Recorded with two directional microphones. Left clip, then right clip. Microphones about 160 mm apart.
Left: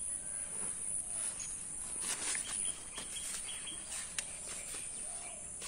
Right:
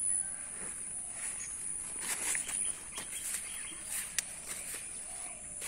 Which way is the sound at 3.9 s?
70° right (ahead or behind).